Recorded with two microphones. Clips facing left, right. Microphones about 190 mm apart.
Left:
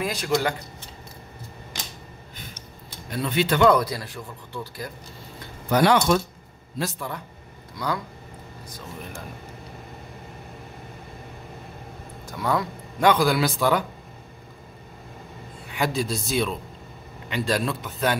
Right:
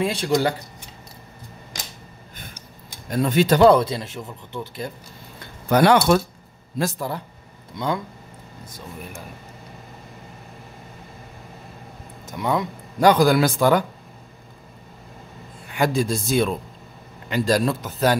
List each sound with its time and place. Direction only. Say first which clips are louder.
0.0 s speech: right 5 dB; 30° right (ahead or behind)
3.1 s speech: right 5 dB; 45° right (ahead or behind); by 4.9 s 25° right (ahead or behind)
5.7 s a man's voice: right 3 dB; 55° right (ahead or behind)
6.8 s a man's voice: right 5 dB; 35° right (ahead or behind)
7.7 s speech: right 3 dB; 25° right (ahead or behind)
12.3 s speech: right 2 dB; 20° right (ahead or behind)
13.0 s a man's voice: right 4 dB; 40° right (ahead or behind)
15.8 s a man's voice: right 4 dB; 50° right (ahead or behind)